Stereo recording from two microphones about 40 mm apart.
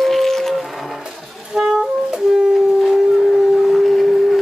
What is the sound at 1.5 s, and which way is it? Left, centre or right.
Music, centre.